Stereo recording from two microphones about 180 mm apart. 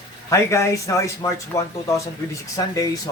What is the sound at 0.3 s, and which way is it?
A man's voice, 15° left (ahead or behind).